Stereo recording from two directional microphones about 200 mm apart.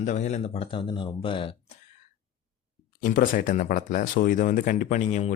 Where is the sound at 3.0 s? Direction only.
45° left (ahead or behind).